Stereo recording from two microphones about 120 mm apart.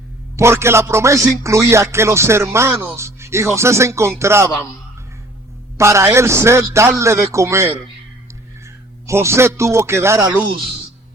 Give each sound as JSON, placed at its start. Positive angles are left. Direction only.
{"t": 0.3, "sound": "speech", "side_deg": -20}
{"t": 5.7, "sound": "a man's voice", "side_deg": -25}